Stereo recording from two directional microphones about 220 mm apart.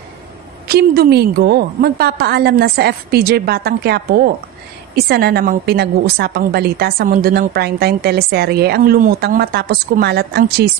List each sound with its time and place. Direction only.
0.7 s a woman's voice: 45° right (ahead or behind)